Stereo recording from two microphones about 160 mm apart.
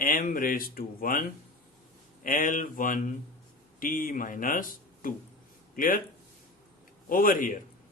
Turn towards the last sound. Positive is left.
turn(degrees=55)  # may be behind; listen again after turning